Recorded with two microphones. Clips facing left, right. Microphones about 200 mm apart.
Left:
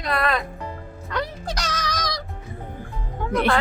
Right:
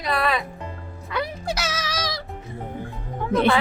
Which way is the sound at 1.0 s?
5° right (ahead or behind).